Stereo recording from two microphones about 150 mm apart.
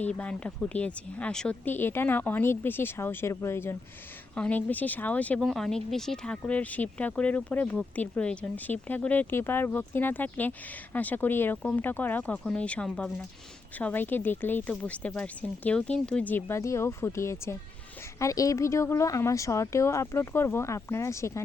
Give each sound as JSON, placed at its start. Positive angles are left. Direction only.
{"t": 0.0, "sound": "speech", "side_deg": 10}